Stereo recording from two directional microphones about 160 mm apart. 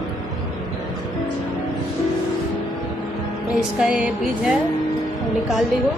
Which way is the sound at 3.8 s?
5° right (ahead or behind).